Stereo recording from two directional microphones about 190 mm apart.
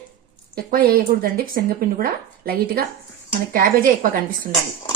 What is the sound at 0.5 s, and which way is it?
Speech, 50° right (ahead or behind).